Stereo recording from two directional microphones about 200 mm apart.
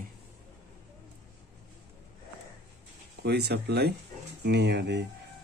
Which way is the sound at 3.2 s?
55° right (ahead or behind).